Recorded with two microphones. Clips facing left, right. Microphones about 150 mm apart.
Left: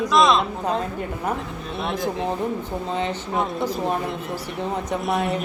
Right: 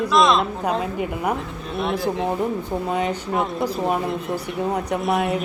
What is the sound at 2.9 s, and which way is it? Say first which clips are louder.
Speech: right 2 dB; 10° right (ahead or behind).